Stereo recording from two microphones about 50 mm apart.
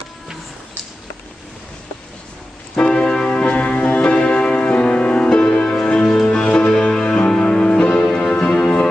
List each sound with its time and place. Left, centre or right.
2.9 s music: centre
3.3 s music: left